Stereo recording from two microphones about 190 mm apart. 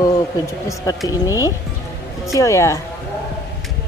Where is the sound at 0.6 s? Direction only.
20° left (ahead or behind).